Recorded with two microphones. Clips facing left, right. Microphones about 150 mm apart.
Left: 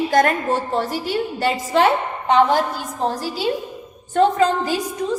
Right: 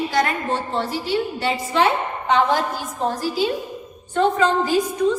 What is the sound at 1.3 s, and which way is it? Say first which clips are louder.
Speech: left 3 dB; 45° left (ahead or behind).